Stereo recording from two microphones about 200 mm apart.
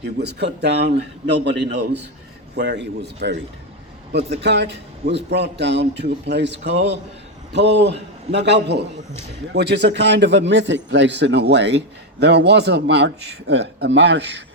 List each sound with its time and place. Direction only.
0.0 s a man's voice: 55° right (ahead or behind)